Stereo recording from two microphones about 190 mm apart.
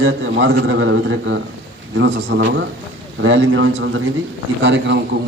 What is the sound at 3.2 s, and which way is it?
Speech, 90° right.